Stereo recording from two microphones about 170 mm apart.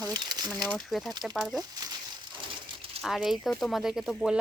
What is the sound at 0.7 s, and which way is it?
Speech, centre (ahead or behind).